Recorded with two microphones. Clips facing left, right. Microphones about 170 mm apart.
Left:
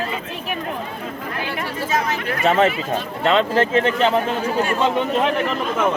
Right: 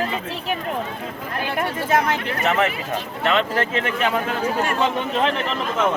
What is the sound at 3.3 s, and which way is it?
Speech, 25° left (ahead or behind).